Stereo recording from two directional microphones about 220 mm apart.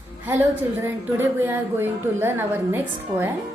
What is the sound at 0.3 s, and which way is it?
Speech, 10° right (ahead or behind).